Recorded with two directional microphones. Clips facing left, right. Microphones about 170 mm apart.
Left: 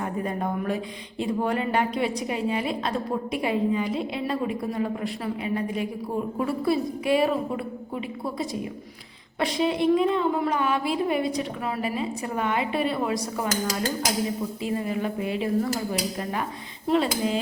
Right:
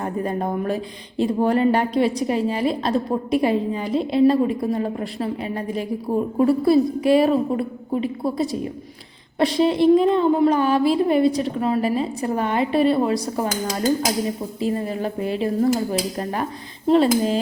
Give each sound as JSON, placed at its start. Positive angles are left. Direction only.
{"t": 0.2, "sound": "a woman's voice", "side_deg": -35}
{"t": 14.6, "sound": "a woman's voice", "side_deg": -35}